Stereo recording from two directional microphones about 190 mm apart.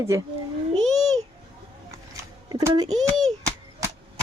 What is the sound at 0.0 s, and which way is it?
Speech, 15° right (ahead or behind).